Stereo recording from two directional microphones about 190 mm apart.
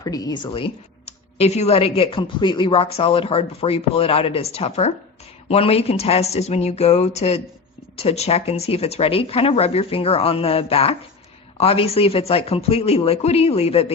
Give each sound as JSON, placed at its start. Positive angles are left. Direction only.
{"t": 0.0, "sound": "speech", "side_deg": 20}